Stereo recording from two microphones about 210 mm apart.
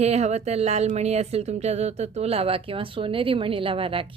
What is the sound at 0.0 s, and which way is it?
A woman's voice, 30° right (ahead or behind).